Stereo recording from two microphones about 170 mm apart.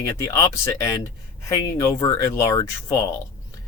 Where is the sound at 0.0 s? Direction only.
20° left (ahead or behind).